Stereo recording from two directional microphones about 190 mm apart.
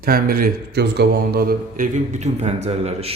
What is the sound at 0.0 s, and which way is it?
A man's voice, 50° right (ahead or behind).